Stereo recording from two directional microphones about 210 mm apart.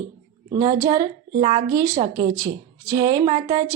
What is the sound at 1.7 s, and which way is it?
A woman's voice, 15° right (ahead or behind).